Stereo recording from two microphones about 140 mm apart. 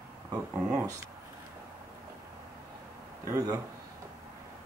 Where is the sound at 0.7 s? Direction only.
20° right (ahead or behind).